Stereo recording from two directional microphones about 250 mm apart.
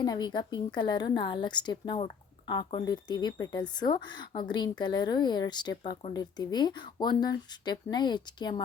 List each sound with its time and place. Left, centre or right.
0.0 s a woman's voice: centre